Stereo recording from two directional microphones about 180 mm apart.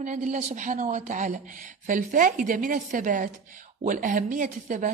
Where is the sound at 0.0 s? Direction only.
45° right (ahead or behind).